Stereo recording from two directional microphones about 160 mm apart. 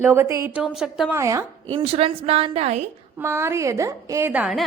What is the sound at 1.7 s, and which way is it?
A woman's voice, 40° right (ahead or behind).